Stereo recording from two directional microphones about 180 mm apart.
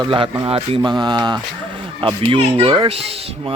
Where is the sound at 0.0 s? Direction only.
30° right (ahead or behind).